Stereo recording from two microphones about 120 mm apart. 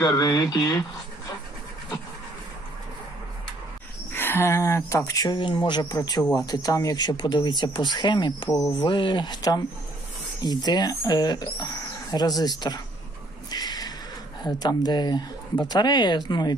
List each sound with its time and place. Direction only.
0.0 s speech: 30° left (ahead or behind)
4.1 s speech: 20° left (ahead or behind); by 12.8 s 35° left (ahead or behind)
13.5 s a sound: 35° left (ahead or behind)
14.4 s speech: 35° left (ahead or behind)